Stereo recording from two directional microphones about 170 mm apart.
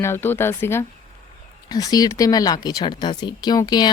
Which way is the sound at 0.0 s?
15° left (ahead or behind).